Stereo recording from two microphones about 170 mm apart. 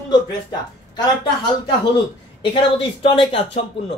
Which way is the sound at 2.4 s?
30° left (ahead or behind).